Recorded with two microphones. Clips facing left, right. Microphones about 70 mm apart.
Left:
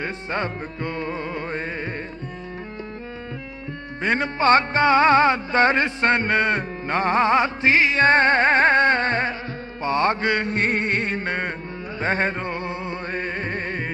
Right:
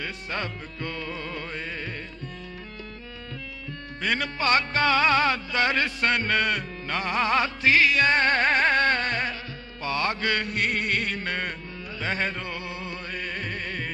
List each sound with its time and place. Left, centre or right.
0.0 s music: left
4.0 s music: left